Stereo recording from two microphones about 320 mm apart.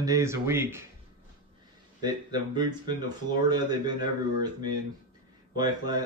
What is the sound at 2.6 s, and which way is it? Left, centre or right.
Speech, centre.